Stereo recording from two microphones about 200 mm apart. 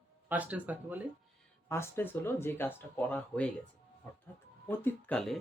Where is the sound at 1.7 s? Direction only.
10° left (ahead or behind).